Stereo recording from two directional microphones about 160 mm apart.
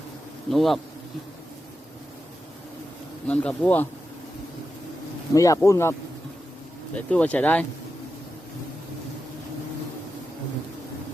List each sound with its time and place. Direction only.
0.5 s speech: centre (ahead or behind)
3.2 s speech: 10° left (ahead or behind)
5.3 s speech: 20° left (ahead or behind)